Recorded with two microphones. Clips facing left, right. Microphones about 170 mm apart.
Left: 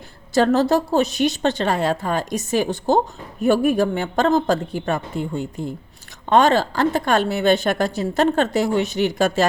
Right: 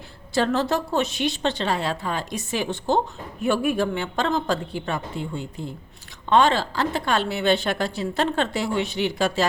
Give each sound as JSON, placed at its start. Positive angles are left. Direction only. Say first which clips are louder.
{"t": 0.3, "sound": "a woman's voice", "louder": "left 6 dB", "side_deg": 40}